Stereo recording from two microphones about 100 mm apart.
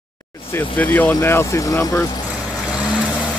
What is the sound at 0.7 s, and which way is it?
Speech, 20° left (ahead or behind).